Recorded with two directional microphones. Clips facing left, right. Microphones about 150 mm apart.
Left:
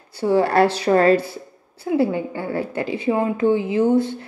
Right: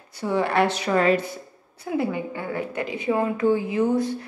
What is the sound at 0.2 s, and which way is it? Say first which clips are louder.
A woman's voice: left 5 dB; 35° left (ahead or behind).